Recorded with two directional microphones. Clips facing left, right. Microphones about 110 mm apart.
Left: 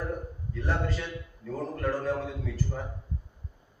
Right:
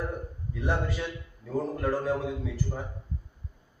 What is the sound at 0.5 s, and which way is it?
A man's voice, 15° right (ahead or behind).